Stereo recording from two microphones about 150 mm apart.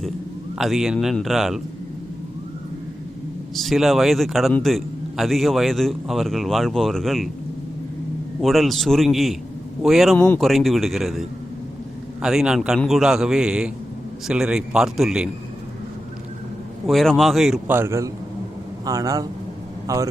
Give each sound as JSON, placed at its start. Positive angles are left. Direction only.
{"t": 0.6, "sound": "a man's voice", "side_deg": 0}
{"t": 3.5, "sound": "a man's voice", "side_deg": 0}
{"t": 8.4, "sound": "a man's voice", "side_deg": 0}
{"t": 16.8, "sound": "a man's voice", "side_deg": 0}
{"t": 17.7, "sound": "a man's voice", "side_deg": -15}